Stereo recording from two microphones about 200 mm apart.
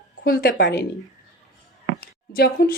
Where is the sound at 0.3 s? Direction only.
50° left (ahead or behind).